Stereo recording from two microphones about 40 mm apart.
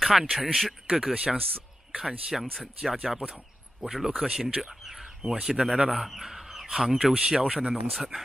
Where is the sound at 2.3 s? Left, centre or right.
Centre.